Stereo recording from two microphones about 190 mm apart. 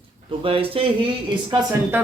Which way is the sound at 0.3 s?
30° right (ahead or behind).